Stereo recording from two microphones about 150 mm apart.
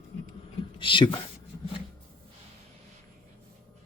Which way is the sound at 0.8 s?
30° left (ahead or behind).